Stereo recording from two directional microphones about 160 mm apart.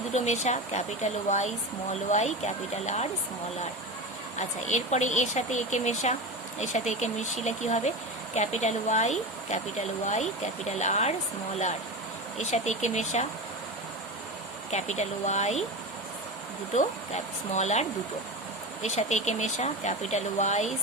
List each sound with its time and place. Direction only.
0.1 s speech: 45° left (ahead or behind)
4.4 s speech: 50° left (ahead or behind)
12.4 s speech: 45° left (ahead or behind)
14.7 s speech: 45° left (ahead or behind)
17.5 s speech: 45° left (ahead or behind)